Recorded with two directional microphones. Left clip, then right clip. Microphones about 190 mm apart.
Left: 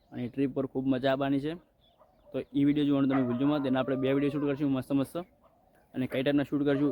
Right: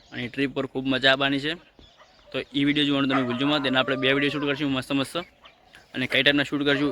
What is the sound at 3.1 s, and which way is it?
Speech, 30° right (ahead or behind).